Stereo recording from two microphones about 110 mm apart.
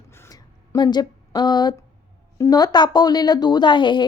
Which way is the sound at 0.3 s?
40° left (ahead or behind).